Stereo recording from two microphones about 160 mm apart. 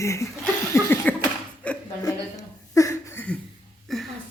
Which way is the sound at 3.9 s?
Centre (ahead or behind).